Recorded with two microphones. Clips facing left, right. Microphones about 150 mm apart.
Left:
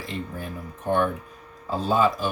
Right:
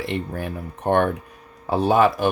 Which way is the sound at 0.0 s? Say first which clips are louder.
Right 6 dB; 70° right (ahead or behind).